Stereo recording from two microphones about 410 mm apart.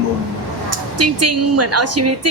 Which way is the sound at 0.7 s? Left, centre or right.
Right.